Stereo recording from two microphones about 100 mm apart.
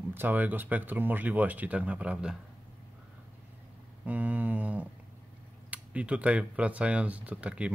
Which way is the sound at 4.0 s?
15° right (ahead or behind).